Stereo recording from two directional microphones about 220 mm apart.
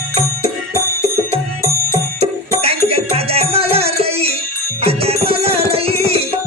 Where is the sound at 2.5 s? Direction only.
25° right (ahead or behind).